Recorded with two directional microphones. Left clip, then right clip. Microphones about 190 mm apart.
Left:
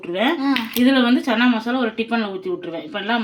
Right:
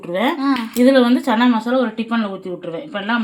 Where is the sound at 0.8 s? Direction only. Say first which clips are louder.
Right 5 dB; 35° right (ahead or behind).